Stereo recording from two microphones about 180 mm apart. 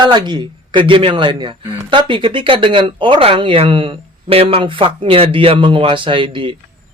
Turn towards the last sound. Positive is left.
turn(degrees=-30)  # may be behind; listen again after turning